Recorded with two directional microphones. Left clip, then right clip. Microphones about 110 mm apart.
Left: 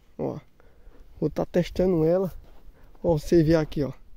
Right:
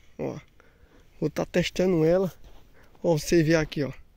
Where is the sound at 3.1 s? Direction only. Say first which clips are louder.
Left 2 dB; 35° left (ahead or behind).